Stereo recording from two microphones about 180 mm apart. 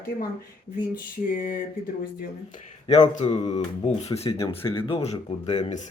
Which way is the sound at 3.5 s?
35° left (ahead or behind).